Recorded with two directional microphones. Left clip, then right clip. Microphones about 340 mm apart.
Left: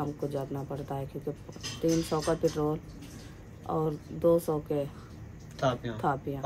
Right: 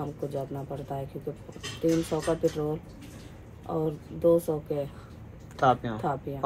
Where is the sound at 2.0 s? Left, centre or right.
Centre.